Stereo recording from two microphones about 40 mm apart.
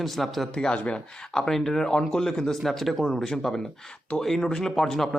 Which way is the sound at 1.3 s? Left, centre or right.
Centre.